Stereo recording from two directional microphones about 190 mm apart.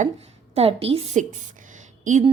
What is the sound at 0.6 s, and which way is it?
Speech, 30° right (ahead or behind).